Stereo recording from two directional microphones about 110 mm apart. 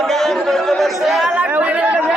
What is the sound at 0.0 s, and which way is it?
Chatter, 5° left (ahead or behind).